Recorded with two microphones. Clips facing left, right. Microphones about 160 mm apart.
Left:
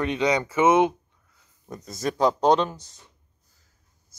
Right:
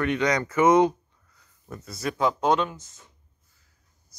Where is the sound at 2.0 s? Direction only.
40° left (ahead or behind).